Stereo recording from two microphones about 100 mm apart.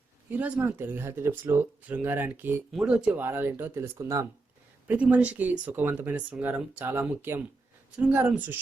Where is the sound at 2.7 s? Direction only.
5° right (ahead or behind).